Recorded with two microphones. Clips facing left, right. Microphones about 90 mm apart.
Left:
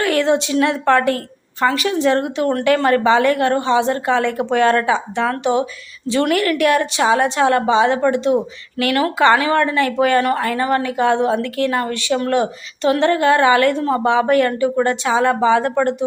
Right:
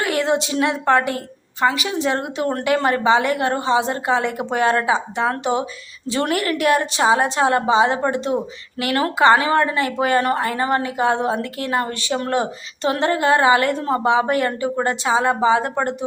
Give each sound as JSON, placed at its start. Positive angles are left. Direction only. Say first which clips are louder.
{"t": 0.0, "sound": "a woman's voice", "louder": "left 3 dB", "side_deg": -20}
{"t": 2.0, "sound": "speech", "louder": "left 5 dB", "side_deg": -20}